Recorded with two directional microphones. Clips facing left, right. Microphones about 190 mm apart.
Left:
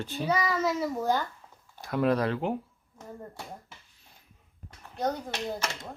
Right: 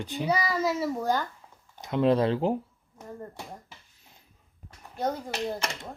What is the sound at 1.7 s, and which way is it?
Speech, 20° right (ahead or behind).